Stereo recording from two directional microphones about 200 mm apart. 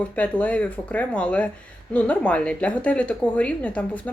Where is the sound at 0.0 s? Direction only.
5° left (ahead or behind).